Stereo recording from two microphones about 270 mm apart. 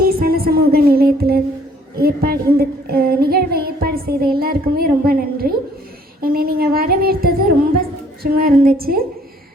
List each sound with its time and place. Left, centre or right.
0.0 s music: right
2.0 s child singing: right